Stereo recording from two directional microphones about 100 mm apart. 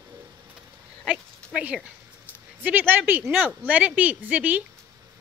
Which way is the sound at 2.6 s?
20° right (ahead or behind).